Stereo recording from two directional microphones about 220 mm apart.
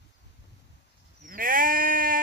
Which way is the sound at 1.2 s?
40° right (ahead or behind).